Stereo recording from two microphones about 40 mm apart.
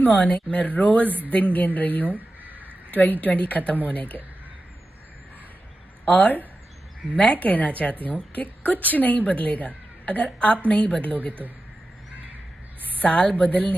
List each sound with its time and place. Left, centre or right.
0.0 s a woman's voice: left
1.0 s a woman's voice: right
1.3 s a woman's voice: left
2.0 s a sound: right
2.9 s a woman's voice: left
6.0 s a woman's voice: left
7.4 s a woman's voice: left
13.0 s a woman's voice: left